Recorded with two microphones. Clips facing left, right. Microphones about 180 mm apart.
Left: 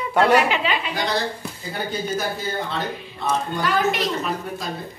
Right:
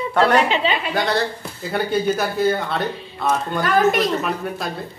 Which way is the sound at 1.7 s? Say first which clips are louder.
Right 6 dB; 65° right (ahead or behind).